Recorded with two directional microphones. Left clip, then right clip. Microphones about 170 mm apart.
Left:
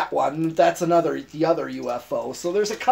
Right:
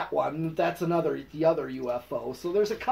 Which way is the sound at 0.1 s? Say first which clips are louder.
Left 6 dB; 65° left (ahead or behind).